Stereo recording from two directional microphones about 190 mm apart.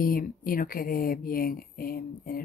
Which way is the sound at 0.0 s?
50° left (ahead or behind).